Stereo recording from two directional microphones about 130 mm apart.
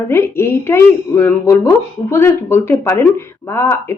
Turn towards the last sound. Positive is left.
turn(degrees=20)  # may be behind; listen again after turning